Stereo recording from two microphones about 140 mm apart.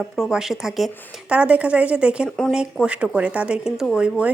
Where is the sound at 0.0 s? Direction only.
5° right (ahead or behind).